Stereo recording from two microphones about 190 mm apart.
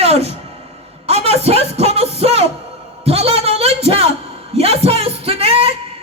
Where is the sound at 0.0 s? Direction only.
35° right (ahead or behind).